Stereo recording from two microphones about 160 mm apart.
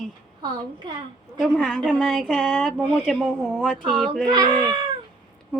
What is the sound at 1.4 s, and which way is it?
Speech, 5° left (ahead or behind).